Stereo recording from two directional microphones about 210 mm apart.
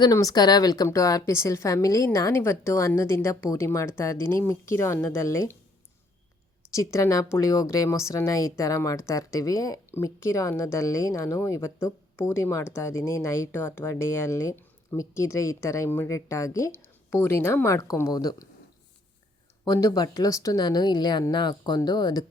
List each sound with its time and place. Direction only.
0.0 s a woman's voice: 15° left (ahead or behind)
6.7 s a woman's voice: 15° left (ahead or behind)
19.6 s speech: 20° left (ahead or behind)